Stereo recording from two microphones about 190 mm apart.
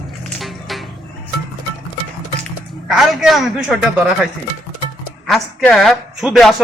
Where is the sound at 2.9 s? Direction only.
Centre (ahead or behind).